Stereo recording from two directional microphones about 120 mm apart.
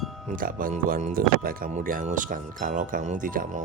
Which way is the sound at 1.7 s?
80° right.